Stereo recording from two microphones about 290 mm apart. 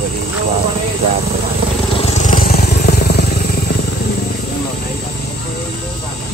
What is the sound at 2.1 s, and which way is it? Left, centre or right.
Vehicle, left.